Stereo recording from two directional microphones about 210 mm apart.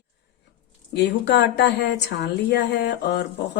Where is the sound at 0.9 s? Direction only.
55° left (ahead or behind).